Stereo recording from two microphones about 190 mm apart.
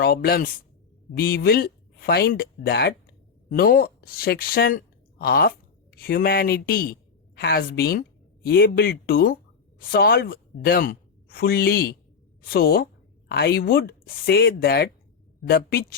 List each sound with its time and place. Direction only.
0.0 s a man's voice: 55° left (ahead or behind)